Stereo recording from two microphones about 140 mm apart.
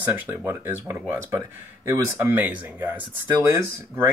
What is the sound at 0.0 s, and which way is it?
Speech, 15° right (ahead or behind).